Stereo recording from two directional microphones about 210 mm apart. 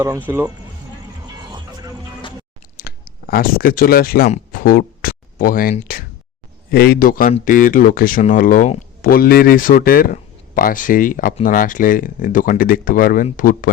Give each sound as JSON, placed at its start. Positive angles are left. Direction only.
{"t": 0.0, "sound": "speech", "side_deg": -10}
{"t": 1.5, "sound": "music", "side_deg": -20}
{"t": 2.7, "sound": "a man's voice", "side_deg": 45}